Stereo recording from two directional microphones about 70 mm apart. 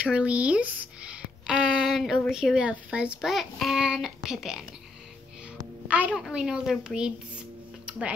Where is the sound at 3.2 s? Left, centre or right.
Centre.